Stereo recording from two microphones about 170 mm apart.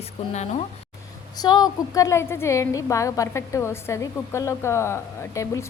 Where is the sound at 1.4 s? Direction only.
25° left (ahead or behind).